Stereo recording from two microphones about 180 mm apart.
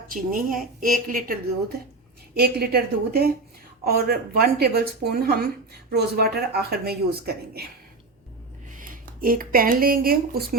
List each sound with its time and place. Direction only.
0.1 s a woman's voice: 50° right (ahead or behind)
2.3 s speech: 60° right (ahead or behind)
8.7 s speech: 50° right (ahead or behind)